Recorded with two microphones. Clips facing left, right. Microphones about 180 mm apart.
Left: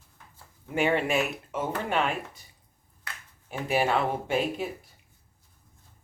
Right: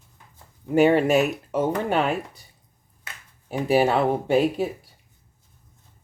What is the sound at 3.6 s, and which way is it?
Speech, 35° right (ahead or behind).